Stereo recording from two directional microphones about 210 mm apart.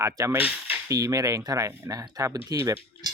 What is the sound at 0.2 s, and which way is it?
Speech, 10° right (ahead or behind).